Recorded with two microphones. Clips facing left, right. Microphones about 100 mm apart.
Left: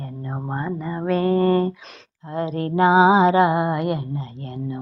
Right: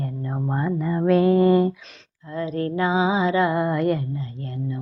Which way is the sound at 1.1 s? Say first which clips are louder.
Right 1 dB; 5° right (ahead or behind).